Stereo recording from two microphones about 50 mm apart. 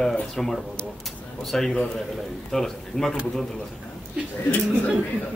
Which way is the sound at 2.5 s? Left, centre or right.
Centre.